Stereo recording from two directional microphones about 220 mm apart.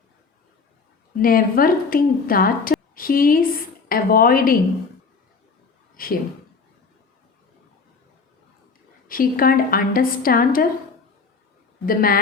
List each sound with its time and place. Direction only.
1.2 s a woman's voice: 40° left (ahead or behind)
6.0 s a man's voice: 40° left (ahead or behind)
9.0 s a woman's voice: 40° left (ahead or behind)
11.9 s a woman's voice: 40° left (ahead or behind)